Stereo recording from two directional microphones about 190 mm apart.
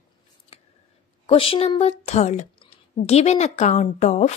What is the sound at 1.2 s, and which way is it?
Speech, 30° left (ahead or behind).